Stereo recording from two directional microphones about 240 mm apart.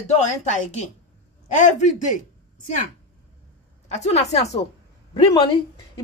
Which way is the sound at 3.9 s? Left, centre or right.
Left.